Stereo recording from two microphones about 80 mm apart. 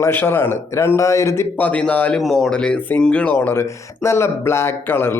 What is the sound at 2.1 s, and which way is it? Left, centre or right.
Speech, centre.